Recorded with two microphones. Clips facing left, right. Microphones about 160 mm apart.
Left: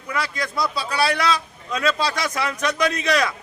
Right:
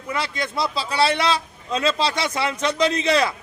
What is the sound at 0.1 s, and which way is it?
A man's voice, 25° right (ahead or behind).